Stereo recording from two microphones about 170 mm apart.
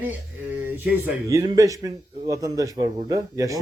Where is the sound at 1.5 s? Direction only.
20° right (ahead or behind).